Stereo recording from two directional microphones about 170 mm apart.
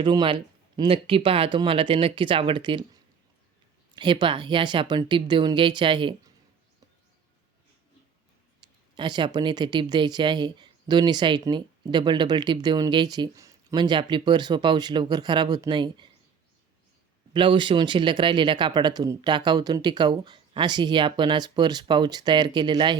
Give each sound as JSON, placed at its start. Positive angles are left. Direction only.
{"t": 0.0, "sound": "speech", "side_deg": -25}
{"t": 3.9, "sound": "speech", "side_deg": -25}
{"t": 8.6, "sound": "a sound", "side_deg": -25}
{"t": 9.0, "sound": "speech", "side_deg": -25}
{"t": 17.3, "sound": "speech", "side_deg": -30}